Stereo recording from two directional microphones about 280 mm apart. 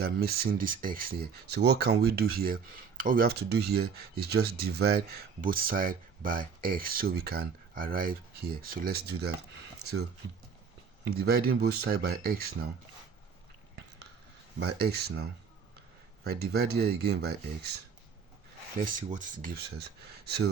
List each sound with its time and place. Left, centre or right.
0.0 s speech: right
14.8 s speech: right
18.9 s speech: right